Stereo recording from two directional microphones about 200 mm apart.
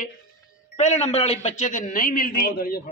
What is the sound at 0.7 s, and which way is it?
A man's voice, 35° left (ahead or behind).